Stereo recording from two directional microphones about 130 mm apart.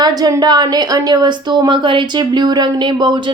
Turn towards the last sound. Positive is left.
turn(degrees=-35)  # may be behind; listen again after turning